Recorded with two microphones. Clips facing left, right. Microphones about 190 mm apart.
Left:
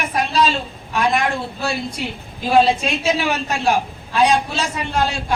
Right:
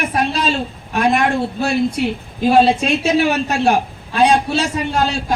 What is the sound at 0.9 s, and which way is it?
Speech, 55° right (ahead or behind).